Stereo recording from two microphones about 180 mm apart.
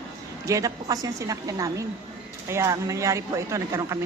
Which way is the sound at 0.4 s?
20° right (ahead or behind).